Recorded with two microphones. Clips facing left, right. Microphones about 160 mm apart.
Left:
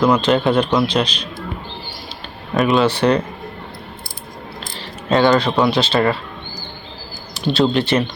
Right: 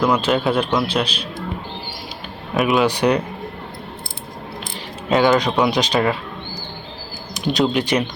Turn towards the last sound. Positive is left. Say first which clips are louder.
# left 2 dB
turn(degrees=-15)  # may be behind; listen again after turning